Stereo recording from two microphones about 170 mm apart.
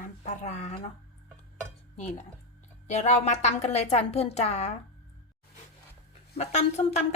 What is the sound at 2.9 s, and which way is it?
A woman's voice, 40° left (ahead or behind).